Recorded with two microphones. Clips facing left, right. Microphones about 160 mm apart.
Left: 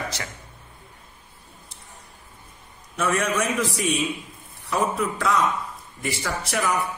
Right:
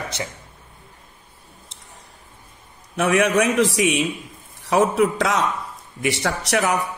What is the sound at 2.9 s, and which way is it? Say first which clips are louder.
A man's voice: right 6 dB; 75° right (ahead or behind).